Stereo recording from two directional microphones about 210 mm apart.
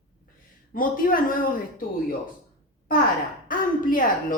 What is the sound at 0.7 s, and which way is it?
Speech, 40° left (ahead or behind).